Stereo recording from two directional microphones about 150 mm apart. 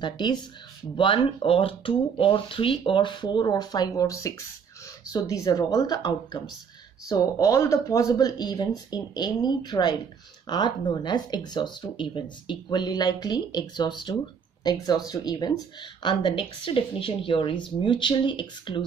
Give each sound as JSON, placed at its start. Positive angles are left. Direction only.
{"t": 0.0, "sound": "speech", "side_deg": 30}